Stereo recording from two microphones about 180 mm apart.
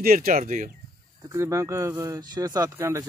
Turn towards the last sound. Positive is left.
turn(degrees=-15)  # may be behind; listen again after turning